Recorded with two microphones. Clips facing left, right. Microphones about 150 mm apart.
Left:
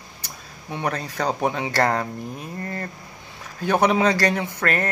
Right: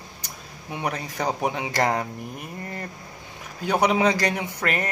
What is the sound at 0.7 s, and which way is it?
A man's voice, 15° right (ahead or behind).